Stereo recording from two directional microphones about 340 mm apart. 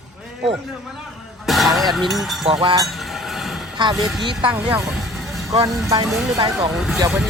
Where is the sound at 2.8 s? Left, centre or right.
Centre.